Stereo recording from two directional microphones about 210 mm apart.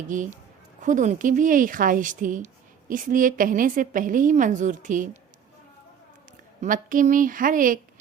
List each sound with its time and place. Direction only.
0.1 s a woman's voice: 35° right (ahead or behind)
6.6 s a woman's voice: 40° right (ahead or behind)